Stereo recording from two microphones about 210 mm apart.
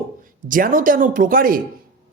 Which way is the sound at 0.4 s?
40° right (ahead or behind).